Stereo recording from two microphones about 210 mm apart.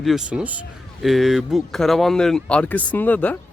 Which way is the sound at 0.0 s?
Centre (ahead or behind).